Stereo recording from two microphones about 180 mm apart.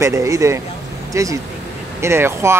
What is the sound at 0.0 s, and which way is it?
Speech, 15° right (ahead or behind).